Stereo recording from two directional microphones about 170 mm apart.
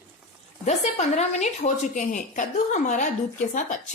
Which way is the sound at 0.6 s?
40° left (ahead or behind).